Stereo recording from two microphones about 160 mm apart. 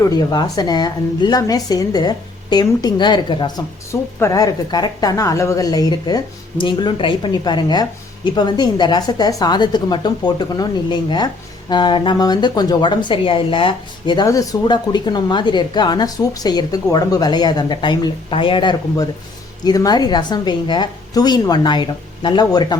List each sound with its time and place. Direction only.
0.0 s speech: 25° left (ahead or behind)